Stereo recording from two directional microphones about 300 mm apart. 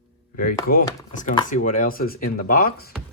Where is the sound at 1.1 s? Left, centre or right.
Left.